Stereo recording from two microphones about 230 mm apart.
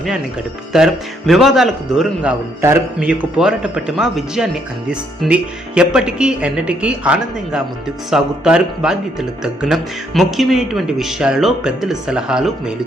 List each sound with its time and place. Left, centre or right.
0.7 s speech: centre